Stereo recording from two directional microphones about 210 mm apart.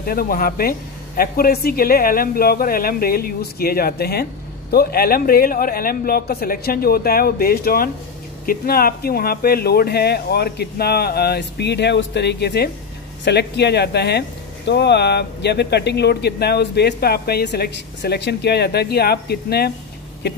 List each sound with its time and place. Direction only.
0.0 s speech: 45° left (ahead or behind)